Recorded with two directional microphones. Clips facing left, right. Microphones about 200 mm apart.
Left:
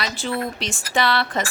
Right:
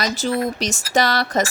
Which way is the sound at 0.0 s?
40° right (ahead or behind).